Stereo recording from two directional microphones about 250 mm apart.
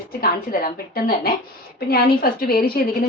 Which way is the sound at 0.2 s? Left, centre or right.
Left.